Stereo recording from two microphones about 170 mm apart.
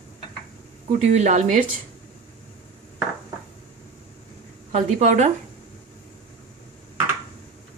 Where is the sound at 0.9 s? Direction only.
45° right (ahead or behind).